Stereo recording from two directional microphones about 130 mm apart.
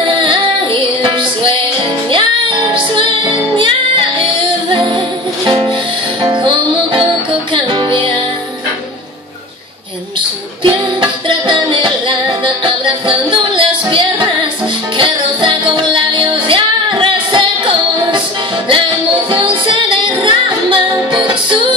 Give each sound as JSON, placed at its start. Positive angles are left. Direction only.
{"t": 1.0, "sound": "music", "side_deg": -40}
{"t": 5.5, "sound": "music", "side_deg": -40}
{"t": 10.6, "sound": "music", "side_deg": -40}
{"t": 19.3, "sound": "music", "side_deg": -40}